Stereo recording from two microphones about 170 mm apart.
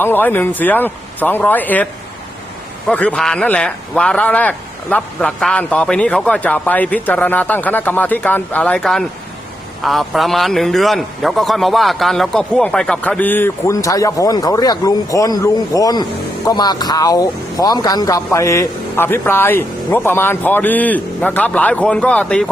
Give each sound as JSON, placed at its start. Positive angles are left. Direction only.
{"t": 0.0, "sound": "a man's voice", "side_deg": 10}